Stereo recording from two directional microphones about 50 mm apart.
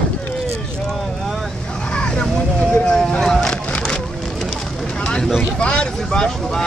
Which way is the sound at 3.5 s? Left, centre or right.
Left.